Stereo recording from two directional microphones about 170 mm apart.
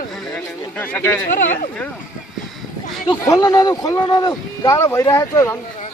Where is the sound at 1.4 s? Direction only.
55° left (ahead or behind).